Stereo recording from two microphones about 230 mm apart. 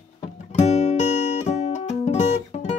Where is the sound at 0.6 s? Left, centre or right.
Left.